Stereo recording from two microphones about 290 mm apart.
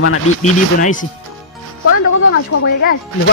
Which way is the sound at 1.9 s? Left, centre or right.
Left.